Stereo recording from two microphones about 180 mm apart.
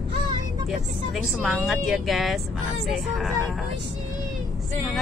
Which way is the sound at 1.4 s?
Centre (ahead or behind).